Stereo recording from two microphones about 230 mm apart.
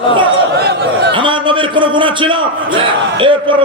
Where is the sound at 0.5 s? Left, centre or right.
Right.